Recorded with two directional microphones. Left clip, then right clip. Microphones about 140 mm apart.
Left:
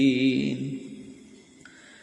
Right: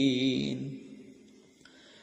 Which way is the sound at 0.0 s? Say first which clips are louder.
Left 5 dB; 20° right (ahead or behind).